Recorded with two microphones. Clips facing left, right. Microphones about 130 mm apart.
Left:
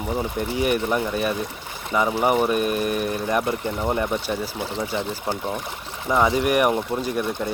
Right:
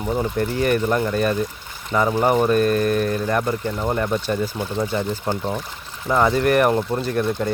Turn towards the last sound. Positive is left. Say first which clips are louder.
# right 3 dB
turn(degrees=10)  # may be behind; listen again after turning